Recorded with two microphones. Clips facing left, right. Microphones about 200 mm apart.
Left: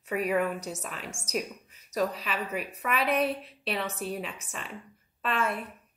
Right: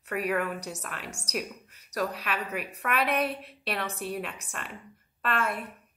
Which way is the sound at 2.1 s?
65° right (ahead or behind).